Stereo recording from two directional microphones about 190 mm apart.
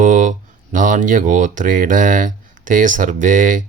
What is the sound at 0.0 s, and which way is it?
Speech, 40° right (ahead or behind).